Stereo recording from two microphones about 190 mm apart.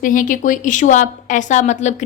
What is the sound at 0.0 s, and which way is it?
A woman's voice, 45° left (ahead or behind).